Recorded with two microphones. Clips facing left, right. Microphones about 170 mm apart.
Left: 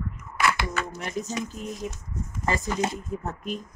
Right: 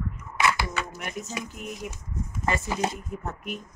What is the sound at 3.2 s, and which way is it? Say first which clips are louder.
Speech: left 2 dB; 35° left (ahead or behind).